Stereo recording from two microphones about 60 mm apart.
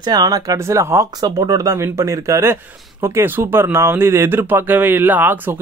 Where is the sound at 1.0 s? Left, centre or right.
Right.